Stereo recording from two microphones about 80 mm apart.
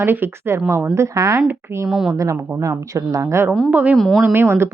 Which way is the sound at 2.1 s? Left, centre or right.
Right.